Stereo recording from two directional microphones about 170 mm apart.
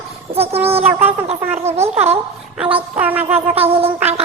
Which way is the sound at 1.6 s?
40° right (ahead or behind).